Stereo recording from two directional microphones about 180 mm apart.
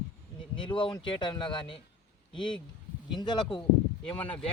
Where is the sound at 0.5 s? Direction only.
25° left (ahead or behind).